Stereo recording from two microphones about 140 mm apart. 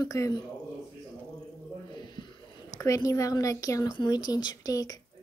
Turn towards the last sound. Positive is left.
turn(degrees=25)  # may be behind; listen again after turning